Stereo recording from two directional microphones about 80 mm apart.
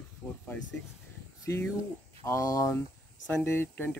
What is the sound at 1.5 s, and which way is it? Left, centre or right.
Speech, left.